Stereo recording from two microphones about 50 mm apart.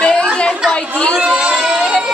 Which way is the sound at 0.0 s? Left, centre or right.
Centre.